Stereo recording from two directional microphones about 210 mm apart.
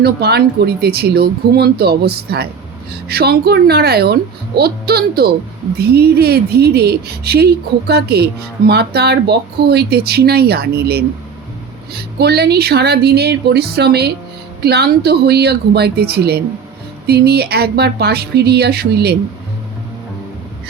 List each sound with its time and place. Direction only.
0.0 s speech: 50° right (ahead or behind)